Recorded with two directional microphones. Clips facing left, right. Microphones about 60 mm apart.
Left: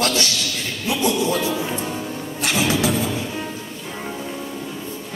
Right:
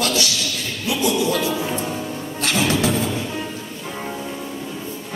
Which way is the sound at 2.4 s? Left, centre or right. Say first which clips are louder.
Even; centre.